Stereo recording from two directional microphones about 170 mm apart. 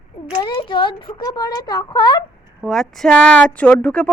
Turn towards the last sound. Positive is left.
turn(degrees=5)  # may be behind; listen again after turning